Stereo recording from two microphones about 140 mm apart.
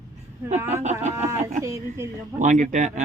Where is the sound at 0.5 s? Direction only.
15° right (ahead or behind).